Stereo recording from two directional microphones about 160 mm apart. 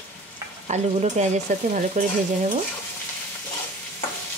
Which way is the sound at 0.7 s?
45° right (ahead or behind).